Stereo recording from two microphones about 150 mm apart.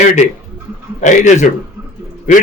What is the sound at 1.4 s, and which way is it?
Speech, 55° left (ahead or behind).